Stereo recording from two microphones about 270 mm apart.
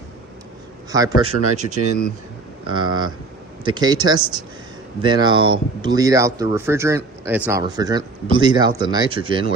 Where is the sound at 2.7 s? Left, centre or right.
Centre.